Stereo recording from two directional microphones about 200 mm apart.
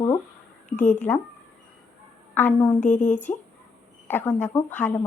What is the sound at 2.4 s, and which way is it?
Speech, 10° left (ahead or behind).